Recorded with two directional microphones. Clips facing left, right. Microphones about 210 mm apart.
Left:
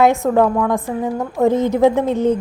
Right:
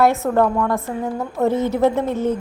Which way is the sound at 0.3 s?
5° left (ahead or behind).